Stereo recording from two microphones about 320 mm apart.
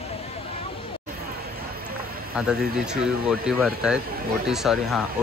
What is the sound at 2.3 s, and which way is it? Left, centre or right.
Speech, centre.